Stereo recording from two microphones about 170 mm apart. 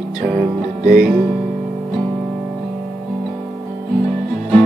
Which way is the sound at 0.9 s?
60° right (ahead or behind).